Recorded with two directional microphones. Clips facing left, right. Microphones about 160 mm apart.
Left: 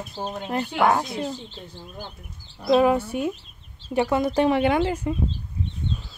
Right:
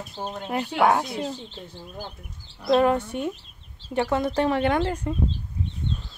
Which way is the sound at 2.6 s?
5° left (ahead or behind).